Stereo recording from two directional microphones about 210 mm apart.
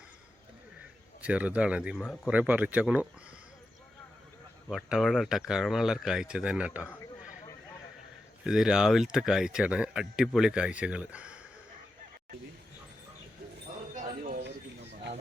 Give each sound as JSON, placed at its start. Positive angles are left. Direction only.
{"t": 1.2, "sound": "speech", "side_deg": -5}
{"t": 4.7, "sound": "speech", "side_deg": 0}
{"t": 8.4, "sound": "speech", "side_deg": -5}
{"t": 13.9, "sound": "a sound", "side_deg": -40}